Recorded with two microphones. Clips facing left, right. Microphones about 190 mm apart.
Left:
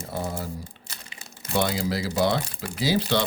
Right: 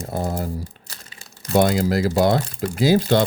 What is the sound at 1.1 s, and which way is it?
Crumpling, 20° left (ahead or behind).